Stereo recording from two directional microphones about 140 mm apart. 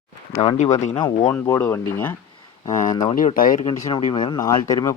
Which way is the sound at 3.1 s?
80° left.